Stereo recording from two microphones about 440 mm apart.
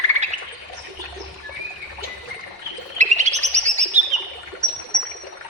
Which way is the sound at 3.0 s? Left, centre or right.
Centre.